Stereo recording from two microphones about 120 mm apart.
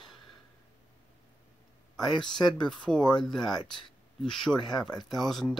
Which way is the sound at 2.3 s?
35° left (ahead or behind).